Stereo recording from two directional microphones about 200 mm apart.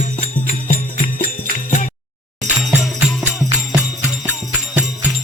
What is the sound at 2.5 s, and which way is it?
Music, 5° right (ahead or behind).